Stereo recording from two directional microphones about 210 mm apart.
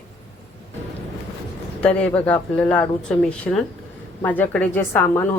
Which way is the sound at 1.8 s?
5° left (ahead or behind).